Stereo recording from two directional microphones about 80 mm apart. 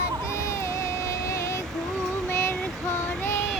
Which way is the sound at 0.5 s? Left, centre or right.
Left.